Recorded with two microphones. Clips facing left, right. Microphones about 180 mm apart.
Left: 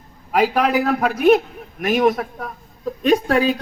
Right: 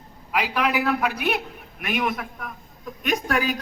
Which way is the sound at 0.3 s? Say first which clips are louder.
Left 7 dB; 45° left (ahead or behind).